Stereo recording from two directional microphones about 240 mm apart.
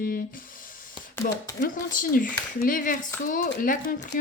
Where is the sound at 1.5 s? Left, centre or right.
Left.